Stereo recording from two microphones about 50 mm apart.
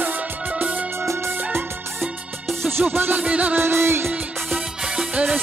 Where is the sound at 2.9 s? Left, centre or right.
Right.